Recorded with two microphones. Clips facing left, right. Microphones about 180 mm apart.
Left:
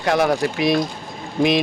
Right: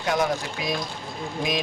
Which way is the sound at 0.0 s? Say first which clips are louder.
Left 6 dB; 75° left (ahead or behind).